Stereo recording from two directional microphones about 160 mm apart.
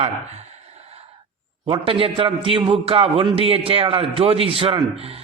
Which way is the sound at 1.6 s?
30° right (ahead or behind).